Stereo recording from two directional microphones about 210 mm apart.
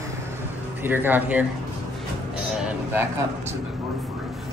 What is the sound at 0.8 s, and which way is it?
Speech, 10° right (ahead or behind).